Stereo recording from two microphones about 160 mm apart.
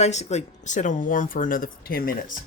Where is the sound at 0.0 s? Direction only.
45° left (ahead or behind).